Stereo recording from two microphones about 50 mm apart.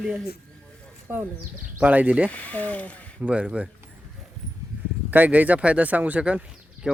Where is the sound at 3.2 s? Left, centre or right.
Right.